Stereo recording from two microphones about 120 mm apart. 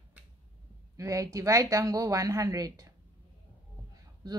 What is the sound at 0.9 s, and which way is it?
A woman's voice, 25° right (ahead or behind).